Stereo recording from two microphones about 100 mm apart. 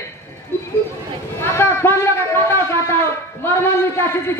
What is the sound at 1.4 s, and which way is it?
Speech, 25° left (ahead or behind).